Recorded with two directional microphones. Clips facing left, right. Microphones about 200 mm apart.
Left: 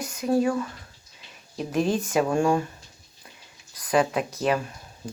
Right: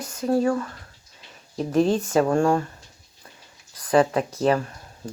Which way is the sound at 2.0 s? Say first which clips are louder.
Right 3 dB; 15° left (ahead or behind).